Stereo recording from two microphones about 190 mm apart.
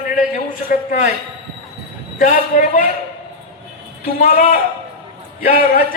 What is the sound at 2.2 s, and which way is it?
Speech, 45° left (ahead or behind).